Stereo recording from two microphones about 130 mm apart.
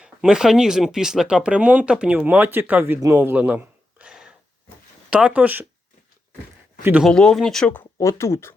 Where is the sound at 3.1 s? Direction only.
15° right (ahead or behind).